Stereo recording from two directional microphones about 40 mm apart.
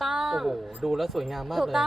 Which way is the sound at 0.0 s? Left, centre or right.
Centre.